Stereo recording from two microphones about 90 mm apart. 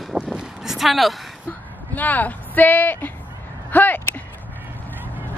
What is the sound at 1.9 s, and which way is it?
Speech, 20° left (ahead or behind).